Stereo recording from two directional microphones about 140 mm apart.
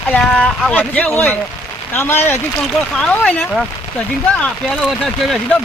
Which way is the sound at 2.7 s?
5° left (ahead or behind).